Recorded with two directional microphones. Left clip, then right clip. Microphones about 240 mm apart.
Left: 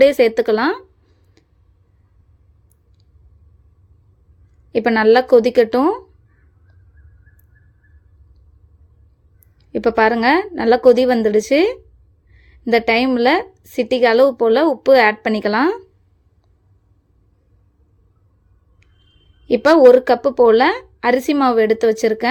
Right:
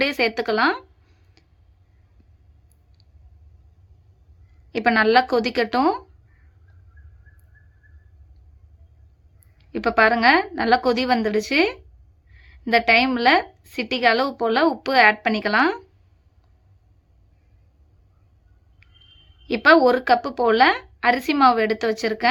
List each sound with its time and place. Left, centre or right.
0.0 s a sound: centre
4.7 s a woman's voice: centre
9.6 s a woman's voice: centre
19.5 s a woman's voice: centre